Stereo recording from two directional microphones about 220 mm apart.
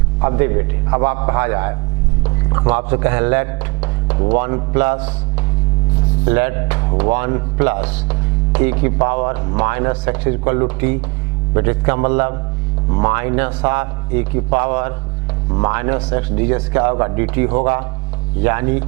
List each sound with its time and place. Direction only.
0.2 s speech: 15° right (ahead or behind)
6.2 s speech: 10° right (ahead or behind)